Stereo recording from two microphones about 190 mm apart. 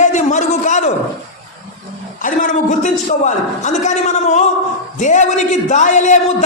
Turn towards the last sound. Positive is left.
turn(degrees=40)  # may be behind; listen again after turning